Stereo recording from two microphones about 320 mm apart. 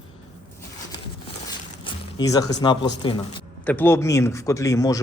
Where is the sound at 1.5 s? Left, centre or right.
Centre.